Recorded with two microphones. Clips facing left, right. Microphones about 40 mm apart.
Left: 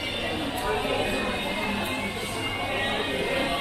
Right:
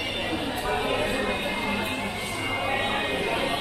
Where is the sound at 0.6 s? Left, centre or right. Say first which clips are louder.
Right 1 dB; right.